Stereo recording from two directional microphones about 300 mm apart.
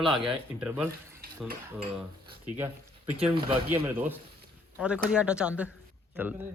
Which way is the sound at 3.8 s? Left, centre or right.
Centre.